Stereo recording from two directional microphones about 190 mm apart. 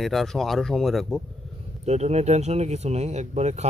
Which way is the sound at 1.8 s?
35° right (ahead or behind).